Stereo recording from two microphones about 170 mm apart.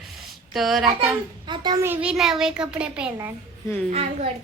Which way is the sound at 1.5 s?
25° right (ahead or behind).